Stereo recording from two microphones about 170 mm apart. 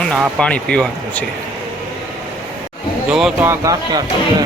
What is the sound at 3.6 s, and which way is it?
Speech, 20° right (ahead or behind).